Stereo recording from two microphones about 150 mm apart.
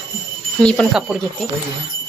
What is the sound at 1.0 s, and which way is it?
Speech, 5° right (ahead or behind).